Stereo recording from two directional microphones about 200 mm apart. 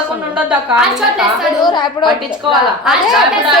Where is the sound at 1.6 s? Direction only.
20° left (ahead or behind).